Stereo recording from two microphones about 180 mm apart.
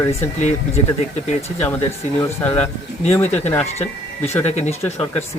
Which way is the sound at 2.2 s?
15° left (ahead or behind).